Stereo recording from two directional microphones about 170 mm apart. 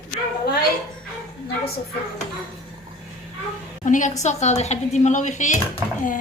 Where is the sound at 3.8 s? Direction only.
50° left (ahead or behind).